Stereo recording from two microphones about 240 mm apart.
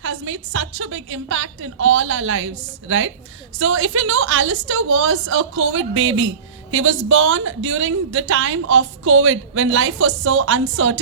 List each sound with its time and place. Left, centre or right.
0.0 s a woman's voice: right